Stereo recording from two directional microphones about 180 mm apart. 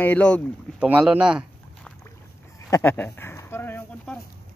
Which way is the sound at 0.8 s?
10° right (ahead or behind).